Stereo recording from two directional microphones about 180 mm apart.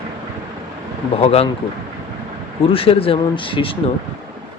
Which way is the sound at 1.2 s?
35° left (ahead or behind).